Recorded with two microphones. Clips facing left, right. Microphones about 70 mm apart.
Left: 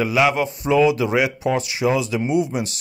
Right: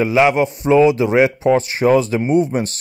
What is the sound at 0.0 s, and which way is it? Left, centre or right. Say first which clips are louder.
A man's voice: right 4 dB; right.